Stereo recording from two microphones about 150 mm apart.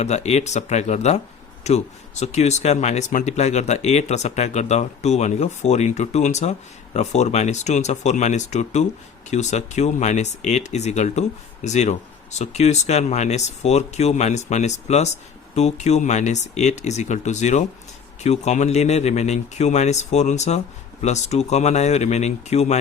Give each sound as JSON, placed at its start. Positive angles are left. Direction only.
{"t": 0.0, "sound": "speech", "side_deg": 50}